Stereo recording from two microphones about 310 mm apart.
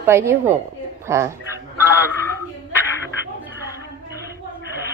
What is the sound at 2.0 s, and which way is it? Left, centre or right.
Speech, centre.